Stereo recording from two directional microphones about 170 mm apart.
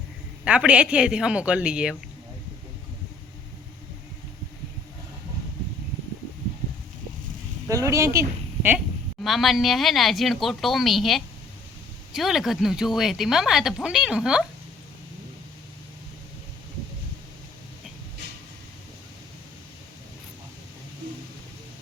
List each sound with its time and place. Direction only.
0.4 s speech: 5° right (ahead or behind)
7.7 s a woman's voice: 20° right (ahead or behind)
9.2 s speech: centre (ahead or behind)